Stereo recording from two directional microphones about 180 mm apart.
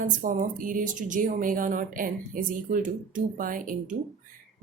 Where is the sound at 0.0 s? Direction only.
50° right (ahead or behind).